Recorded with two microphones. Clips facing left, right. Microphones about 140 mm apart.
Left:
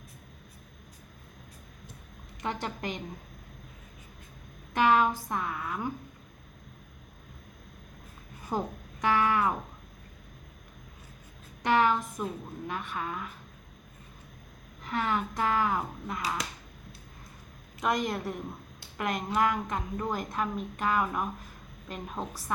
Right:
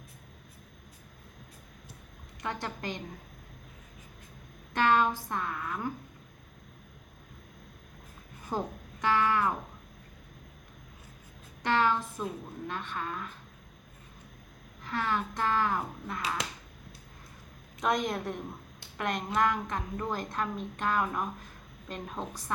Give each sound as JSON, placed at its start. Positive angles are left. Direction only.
{"t": 2.4, "sound": "a woman's voice", "side_deg": 20}
{"t": 4.7, "sound": "speech", "side_deg": 10}
{"t": 8.4, "sound": "guitar", "side_deg": 10}
{"t": 11.6, "sound": "speech", "side_deg": 15}
{"t": 14.8, "sound": "speech", "side_deg": 15}
{"t": 17.7, "sound": "a woman's voice", "side_deg": 0}